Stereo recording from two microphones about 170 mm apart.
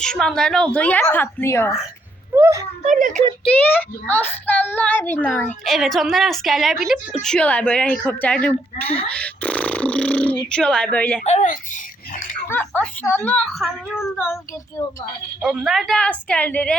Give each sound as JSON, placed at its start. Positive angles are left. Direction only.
{"t": 0.0, "sound": "a woman's voice", "side_deg": 5}
{"t": 2.3, "sound": "speech", "side_deg": -15}
{"t": 2.8, "sound": "speech", "side_deg": -45}
{"t": 3.4, "sound": "a woman's voice", "side_deg": 10}
{"t": 11.2, "sound": "a child's voice", "side_deg": 45}
{"t": 12.5, "sound": "speech", "side_deg": 10}
{"t": 14.0, "sound": "speech", "side_deg": 15}
{"t": 15.4, "sound": "a woman's voice", "side_deg": -5}